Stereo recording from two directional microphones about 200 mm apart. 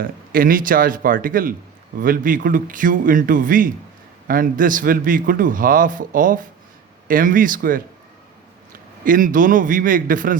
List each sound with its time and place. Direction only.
0.0 s a man's voice: 45° right (ahead or behind)
9.0 s a man's voice: 45° right (ahead or behind)